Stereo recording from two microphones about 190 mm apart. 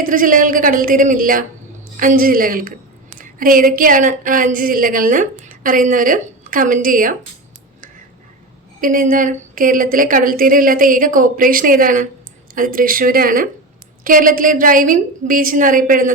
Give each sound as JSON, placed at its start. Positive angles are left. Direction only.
{"t": 0.0, "sound": "a woman's voice", "side_deg": -45}
{"t": 8.8, "sound": "a woman's voice", "side_deg": -45}